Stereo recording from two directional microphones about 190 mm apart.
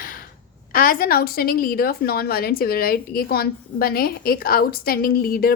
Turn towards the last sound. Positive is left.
turn(degrees=50)  # may be behind; listen again after turning